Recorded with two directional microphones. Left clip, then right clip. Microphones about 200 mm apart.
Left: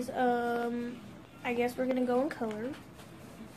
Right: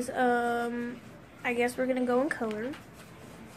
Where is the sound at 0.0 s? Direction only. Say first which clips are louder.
Right 3 dB; 15° right (ahead or behind).